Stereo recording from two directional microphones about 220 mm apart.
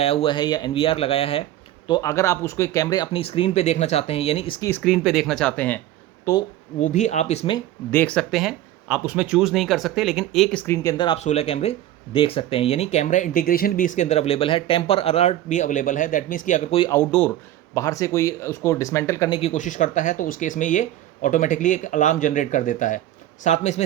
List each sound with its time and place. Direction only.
0.0 s speech: 25° left (ahead or behind)
1.9 s speech: 15° left (ahead or behind)
4.7 s speech: 5° left (ahead or behind)
6.7 s speech: 30° left (ahead or behind)
7.9 s speech: 5° left (ahead or behind); by 16.8 s 35° left (ahead or behind)
16.8 s speech: 10° left (ahead or behind)
19.4 s speech: 30° left (ahead or behind)